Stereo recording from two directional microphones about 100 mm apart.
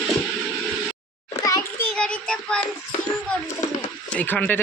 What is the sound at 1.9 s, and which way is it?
Child singing, 10° left (ahead or behind).